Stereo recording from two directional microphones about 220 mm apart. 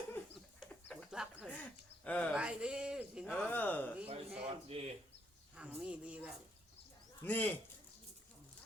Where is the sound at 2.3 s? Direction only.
5° right (ahead or behind).